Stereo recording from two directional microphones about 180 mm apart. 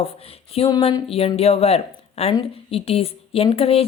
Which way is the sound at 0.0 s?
30° left (ahead or behind).